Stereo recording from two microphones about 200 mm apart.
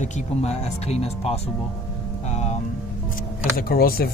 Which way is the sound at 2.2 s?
35° left (ahead or behind).